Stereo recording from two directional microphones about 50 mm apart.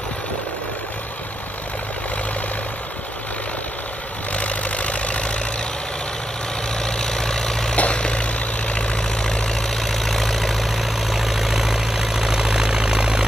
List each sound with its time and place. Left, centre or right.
4.3 s vehicle: left
6.8 s vehicle: centre
7.7 s vehicle: left; by 13.2 s centre